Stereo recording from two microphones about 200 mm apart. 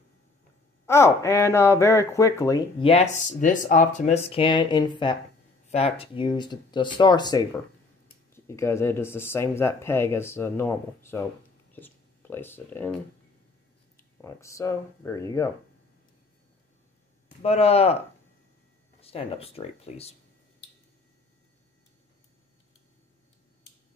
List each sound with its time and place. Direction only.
0.8 s speech: 15° left (ahead or behind)
14.2 s speech: 15° left (ahead or behind)
17.4 s speech: 30° left (ahead or behind)
18.9 s speech: 30° left (ahead or behind)